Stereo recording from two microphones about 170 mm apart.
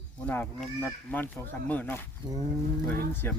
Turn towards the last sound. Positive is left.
turn(degrees=10)  # may be behind; listen again after turning